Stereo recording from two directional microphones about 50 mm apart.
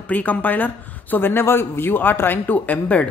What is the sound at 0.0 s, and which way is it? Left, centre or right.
Speech, left.